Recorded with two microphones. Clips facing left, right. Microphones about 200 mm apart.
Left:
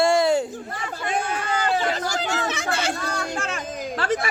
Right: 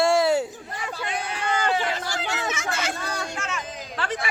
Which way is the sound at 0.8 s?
50° left (ahead or behind).